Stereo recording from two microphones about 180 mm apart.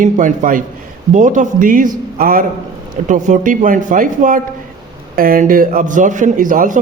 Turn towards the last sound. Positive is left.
turn(degrees=-45)  # may be behind; listen again after turning